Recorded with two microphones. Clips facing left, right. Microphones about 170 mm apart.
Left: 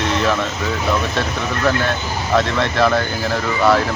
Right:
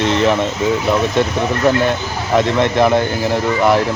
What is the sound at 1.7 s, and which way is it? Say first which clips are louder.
Speech: right 3 dB; 20° right (ahead or behind).